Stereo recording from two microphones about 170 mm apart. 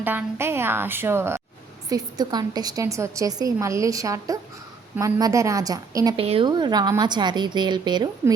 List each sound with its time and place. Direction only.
0.0 s a woman's voice: 10° right (ahead or behind)
6.1 s a woman's voice: 35° right (ahead or behind)